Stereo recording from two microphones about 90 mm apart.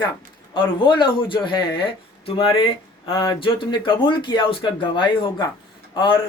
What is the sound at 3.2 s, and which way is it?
Speech, 65° left (ahead or behind).